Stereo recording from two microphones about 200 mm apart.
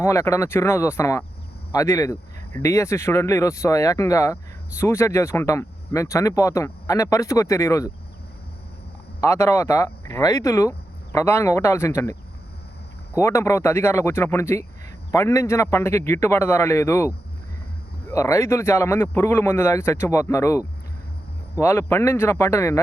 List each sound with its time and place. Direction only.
0.0 s speech: 15° left (ahead or behind)
9.2 s speech: 15° left (ahead or behind)
13.1 s speech: 15° left (ahead or behind)
18.1 s speech: 15° left (ahead or behind)